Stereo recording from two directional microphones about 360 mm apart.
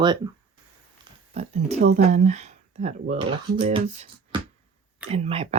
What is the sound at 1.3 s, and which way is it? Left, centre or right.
Speech, centre.